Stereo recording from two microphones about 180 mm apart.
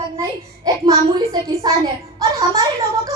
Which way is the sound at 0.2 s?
20° right (ahead or behind).